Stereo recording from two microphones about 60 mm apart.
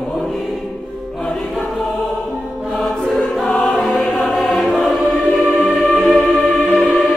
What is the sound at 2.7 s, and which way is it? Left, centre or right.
Choir, centre.